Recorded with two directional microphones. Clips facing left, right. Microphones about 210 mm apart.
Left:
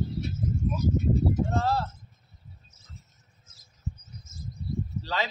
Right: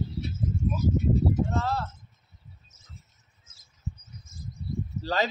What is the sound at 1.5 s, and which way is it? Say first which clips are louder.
Speech: left 2 dB; 35° left (ahead or behind).